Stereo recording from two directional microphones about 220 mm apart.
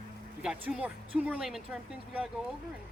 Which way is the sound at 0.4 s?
5° right (ahead or behind).